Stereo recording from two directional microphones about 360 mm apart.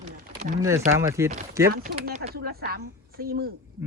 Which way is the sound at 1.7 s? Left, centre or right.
Right.